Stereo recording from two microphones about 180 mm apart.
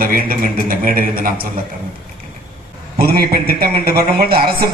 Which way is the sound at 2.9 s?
55° right (ahead or behind).